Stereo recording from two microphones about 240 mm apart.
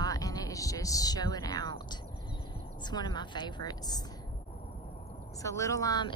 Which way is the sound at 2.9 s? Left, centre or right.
Centre.